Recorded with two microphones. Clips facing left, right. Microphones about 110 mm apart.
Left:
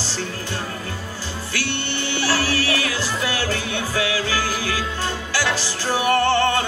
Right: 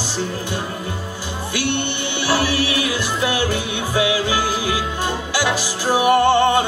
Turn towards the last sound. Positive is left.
turn(degrees=-15)  # may be behind; listen again after turning